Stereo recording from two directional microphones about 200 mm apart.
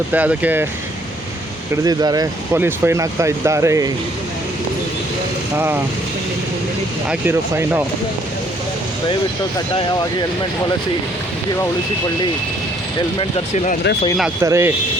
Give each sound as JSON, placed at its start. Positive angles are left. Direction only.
{"t": 0.1, "sound": "speech", "side_deg": -10}
{"t": 1.7, "sound": "speech", "side_deg": -20}
{"t": 5.5, "sound": "speech", "side_deg": -10}
{"t": 7.1, "sound": "speech", "side_deg": -10}
{"t": 14.4, "sound": "speech", "side_deg": -15}